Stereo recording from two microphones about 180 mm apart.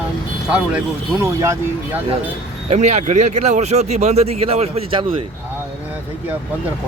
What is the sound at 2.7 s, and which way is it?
Speech, 40° right (ahead or behind).